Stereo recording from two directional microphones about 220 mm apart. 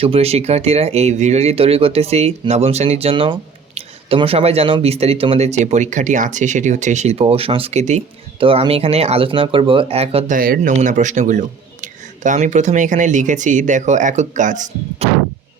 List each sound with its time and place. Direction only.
0.0 s speech: 25° right (ahead or behind)
10.3 s a man's voice: 40° right (ahead or behind)